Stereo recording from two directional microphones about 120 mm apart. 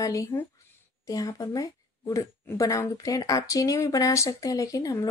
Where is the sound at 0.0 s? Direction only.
25° left (ahead or behind).